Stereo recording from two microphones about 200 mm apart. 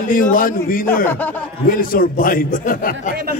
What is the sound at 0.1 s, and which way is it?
Speech, 45° left (ahead or behind).